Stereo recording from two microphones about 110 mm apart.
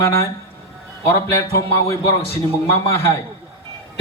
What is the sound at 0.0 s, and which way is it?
Speech, 25° left (ahead or behind).